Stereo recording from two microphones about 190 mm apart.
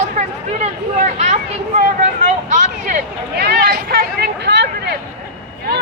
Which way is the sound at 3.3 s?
55° right (ahead or behind).